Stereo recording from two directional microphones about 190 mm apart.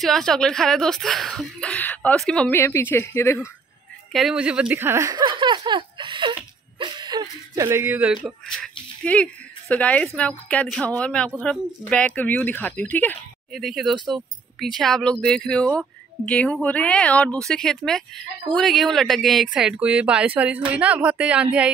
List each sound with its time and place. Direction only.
0.0 s a woman's voice: centre (ahead or behind)
4.1 s a sound: centre (ahead or behind)
9.0 s a woman's voice: 5° left (ahead or behind)